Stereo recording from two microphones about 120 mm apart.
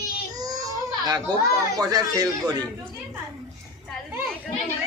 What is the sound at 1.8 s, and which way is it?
Speech, 30° right (ahead or behind).